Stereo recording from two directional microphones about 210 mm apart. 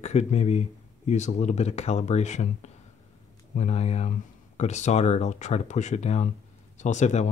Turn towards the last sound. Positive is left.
turn(degrees=35)  # may be behind; listen again after turning